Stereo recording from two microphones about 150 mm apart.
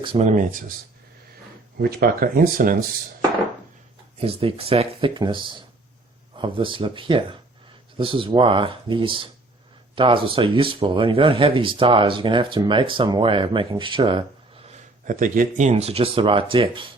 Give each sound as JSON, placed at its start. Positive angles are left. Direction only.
{"t": 0.2, "sound": "speech", "side_deg": -55}
{"t": 1.8, "sound": "speech", "side_deg": -90}
{"t": 4.2, "sound": "speech", "side_deg": -40}
{"t": 14.7, "sound": "speech", "side_deg": -60}